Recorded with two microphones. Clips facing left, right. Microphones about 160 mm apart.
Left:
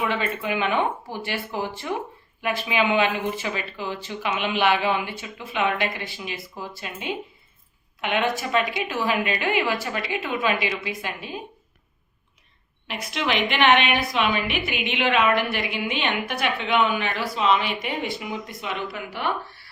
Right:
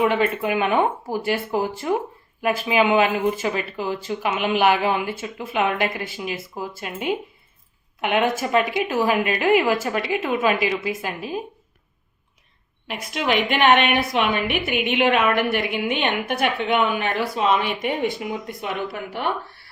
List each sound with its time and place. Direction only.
0.0 s a woman's voice: 50° right (ahead or behind)
11.2 s a woman's voice: 5° right (ahead or behind)
12.9 s a woman's voice: 45° right (ahead or behind)